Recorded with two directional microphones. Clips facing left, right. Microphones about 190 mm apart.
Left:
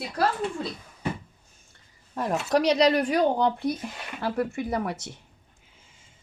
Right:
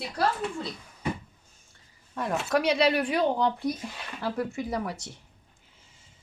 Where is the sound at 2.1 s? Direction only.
40° left (ahead or behind).